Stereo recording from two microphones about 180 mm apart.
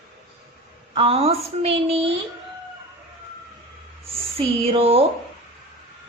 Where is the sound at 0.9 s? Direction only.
30° right (ahead or behind).